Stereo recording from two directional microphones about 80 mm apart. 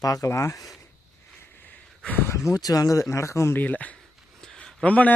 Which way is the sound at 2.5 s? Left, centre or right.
Left.